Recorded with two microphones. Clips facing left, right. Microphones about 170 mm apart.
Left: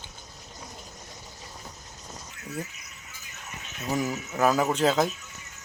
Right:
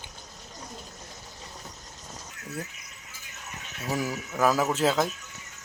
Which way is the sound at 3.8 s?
Centre (ahead or behind).